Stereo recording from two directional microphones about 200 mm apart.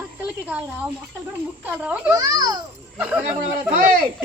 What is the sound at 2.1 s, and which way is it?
Speech, 20° right (ahead or behind).